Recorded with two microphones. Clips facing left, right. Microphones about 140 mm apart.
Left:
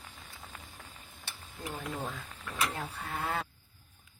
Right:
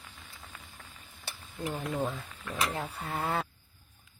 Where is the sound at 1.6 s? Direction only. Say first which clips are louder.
Right 5 dB; 35° right (ahead or behind).